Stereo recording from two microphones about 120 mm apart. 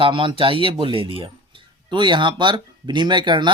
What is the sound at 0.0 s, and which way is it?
Speech, 45° right (ahead or behind).